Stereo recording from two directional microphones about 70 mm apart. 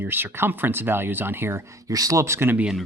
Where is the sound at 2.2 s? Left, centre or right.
Right.